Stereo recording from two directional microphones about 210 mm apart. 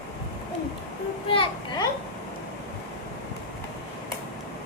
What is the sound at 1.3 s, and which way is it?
Speech, 25° left (ahead or behind).